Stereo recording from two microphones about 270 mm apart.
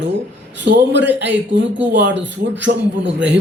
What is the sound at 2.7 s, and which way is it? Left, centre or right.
Speech, right.